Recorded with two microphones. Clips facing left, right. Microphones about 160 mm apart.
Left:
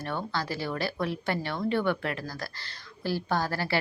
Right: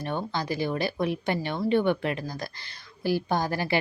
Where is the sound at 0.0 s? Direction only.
20° right (ahead or behind).